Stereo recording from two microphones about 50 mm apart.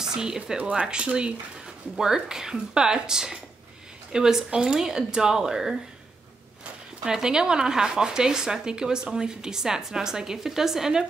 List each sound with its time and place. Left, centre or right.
0.0 s speech: centre
0.6 s a woman's voice: right; by 5.8 s centre
7.1 s a woman's voice: centre